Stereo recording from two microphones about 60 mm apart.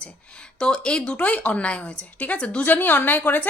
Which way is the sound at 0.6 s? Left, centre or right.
Centre.